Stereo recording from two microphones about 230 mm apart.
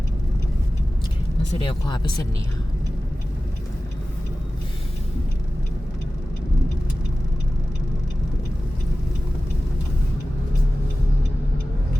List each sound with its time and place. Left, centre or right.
1.6 s speech: centre